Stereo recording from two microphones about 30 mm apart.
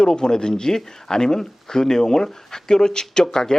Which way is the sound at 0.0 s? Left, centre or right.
Left.